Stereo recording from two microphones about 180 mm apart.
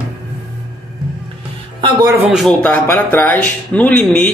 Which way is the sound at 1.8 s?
20° right (ahead or behind).